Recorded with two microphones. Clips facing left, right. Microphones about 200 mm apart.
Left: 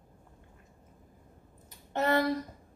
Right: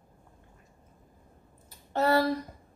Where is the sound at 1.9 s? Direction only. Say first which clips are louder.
Right 3 dB; 35° right (ahead or behind).